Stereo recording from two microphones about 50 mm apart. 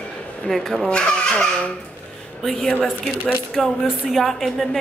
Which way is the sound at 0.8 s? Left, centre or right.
Centre.